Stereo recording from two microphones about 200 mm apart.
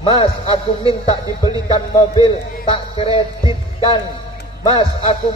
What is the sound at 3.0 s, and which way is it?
Music, 25° left (ahead or behind).